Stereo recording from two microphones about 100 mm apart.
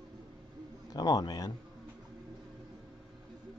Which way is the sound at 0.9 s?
40° left (ahead or behind).